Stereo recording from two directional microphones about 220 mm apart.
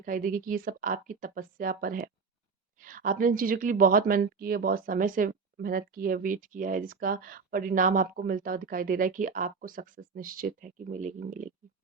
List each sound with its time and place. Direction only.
0.0 s speech: 40° right (ahead or behind)